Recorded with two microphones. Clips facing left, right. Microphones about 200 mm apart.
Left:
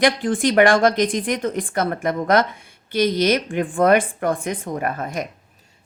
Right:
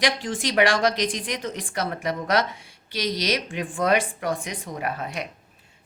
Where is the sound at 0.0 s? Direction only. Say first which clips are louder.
Left 7 dB; 55° left (ahead or behind).